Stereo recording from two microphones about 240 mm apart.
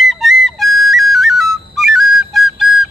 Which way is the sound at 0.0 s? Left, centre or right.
Centre.